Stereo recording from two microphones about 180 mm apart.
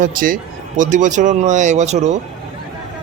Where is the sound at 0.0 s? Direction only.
50° right (ahead or behind).